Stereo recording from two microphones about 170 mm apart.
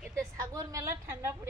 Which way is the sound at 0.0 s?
15° right (ahead or behind).